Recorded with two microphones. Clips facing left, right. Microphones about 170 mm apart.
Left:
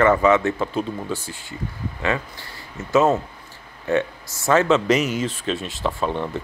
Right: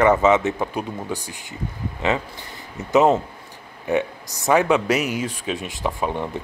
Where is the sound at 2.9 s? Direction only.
20° right (ahead or behind).